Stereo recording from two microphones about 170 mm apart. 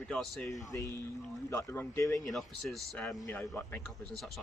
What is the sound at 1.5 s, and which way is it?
Speech, 15° left (ahead or behind).